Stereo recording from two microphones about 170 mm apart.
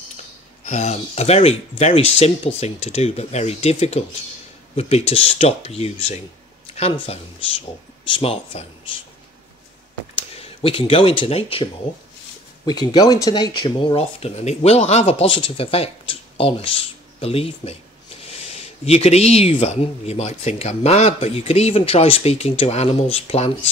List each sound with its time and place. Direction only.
0.7 s speech: 40° left (ahead or behind)
8.1 s speech: 35° left (ahead or behind)
10.3 s speech: 35° left (ahead or behind)